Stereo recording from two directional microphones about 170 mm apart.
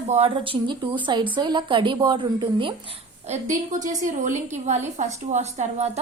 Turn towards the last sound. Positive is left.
turn(degrees=-40)  # may be behind; listen again after turning